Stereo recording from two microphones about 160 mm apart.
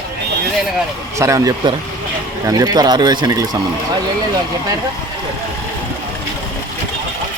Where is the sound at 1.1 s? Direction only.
20° right (ahead or behind).